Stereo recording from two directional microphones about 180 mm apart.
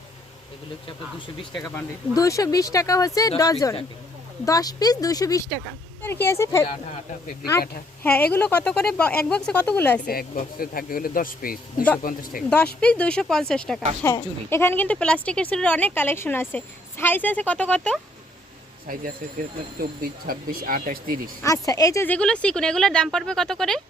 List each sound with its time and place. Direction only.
1.7 s a woman's voice: 15° left (ahead or behind)
8.0 s a woman's voice: 10° left (ahead or behind)
10.1 s speech: 55° left (ahead or behind)
12.5 s speech: 5° left (ahead or behind)
14.0 s a woman's voice: 15° left (ahead or behind)
19.8 s speech: 55° right (ahead or behind)
21.4 s speech: 20° left (ahead or behind); by 23.8 s 5° left (ahead or behind)